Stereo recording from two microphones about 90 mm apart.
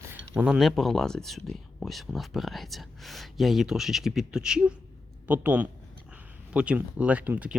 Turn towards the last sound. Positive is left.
turn(degrees=-15)  # may be behind; listen again after turning